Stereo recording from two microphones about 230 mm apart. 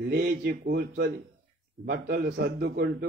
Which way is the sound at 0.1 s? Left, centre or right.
Right.